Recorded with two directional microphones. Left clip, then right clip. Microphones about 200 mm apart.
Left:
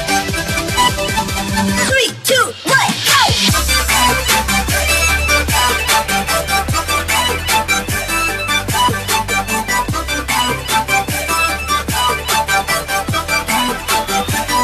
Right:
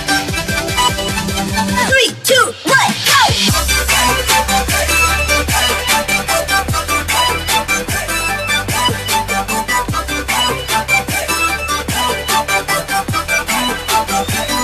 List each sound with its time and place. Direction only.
2.0 s music: centre (ahead or behind)